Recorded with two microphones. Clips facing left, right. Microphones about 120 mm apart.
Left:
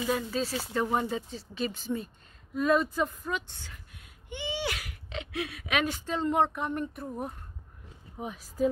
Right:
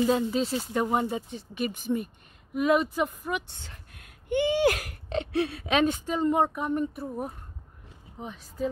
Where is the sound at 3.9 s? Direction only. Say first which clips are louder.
Right 16 dB; 55° right (ahead or behind); by 5.9 s 30° right (ahead or behind).